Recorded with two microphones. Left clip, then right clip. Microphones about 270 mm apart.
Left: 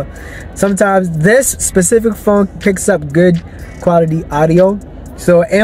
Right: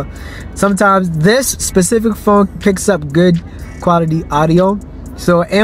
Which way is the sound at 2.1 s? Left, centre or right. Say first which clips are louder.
Even; left.